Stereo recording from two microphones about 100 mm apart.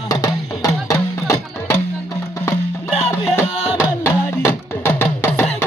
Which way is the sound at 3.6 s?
10° right (ahead or behind).